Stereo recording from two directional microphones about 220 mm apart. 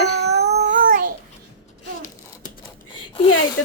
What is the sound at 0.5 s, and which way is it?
Child singing, 40° right (ahead or behind).